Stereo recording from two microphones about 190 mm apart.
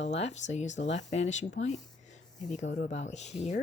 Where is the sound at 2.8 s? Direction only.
40° left (ahead or behind).